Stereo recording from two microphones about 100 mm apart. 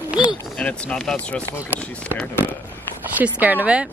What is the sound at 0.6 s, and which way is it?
Speech, 10° left (ahead or behind).